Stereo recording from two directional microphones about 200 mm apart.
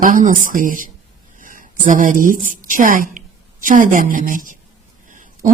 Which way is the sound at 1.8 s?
40° right (ahead or behind).